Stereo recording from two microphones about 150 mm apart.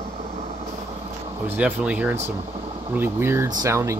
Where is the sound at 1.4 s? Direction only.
10° right (ahead or behind).